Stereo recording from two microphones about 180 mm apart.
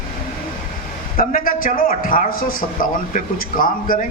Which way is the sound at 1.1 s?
50° left (ahead or behind).